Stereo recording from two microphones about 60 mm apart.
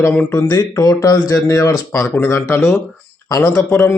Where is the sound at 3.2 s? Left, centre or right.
Left.